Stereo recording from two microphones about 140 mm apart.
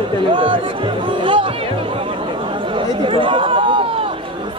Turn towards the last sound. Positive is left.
turn(degrees=-35)  # may be behind; listen again after turning